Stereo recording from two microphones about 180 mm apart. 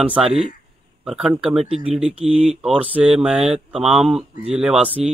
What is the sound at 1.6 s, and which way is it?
Speech, 30° right (ahead or behind).